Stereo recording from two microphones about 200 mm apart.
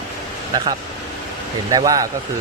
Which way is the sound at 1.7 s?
20° right (ahead or behind).